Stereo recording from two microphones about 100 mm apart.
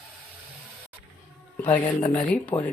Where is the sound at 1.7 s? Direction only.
20° left (ahead or behind).